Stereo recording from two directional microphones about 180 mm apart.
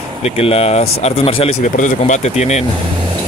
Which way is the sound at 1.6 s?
45° left (ahead or behind).